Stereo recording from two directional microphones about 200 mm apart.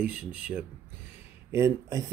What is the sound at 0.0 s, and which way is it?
Speech, 5° right (ahead or behind).